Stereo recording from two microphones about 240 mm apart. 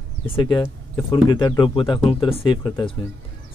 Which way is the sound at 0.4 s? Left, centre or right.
Centre.